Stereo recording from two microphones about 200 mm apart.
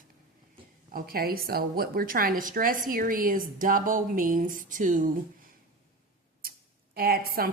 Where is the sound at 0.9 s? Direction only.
50° right (ahead or behind).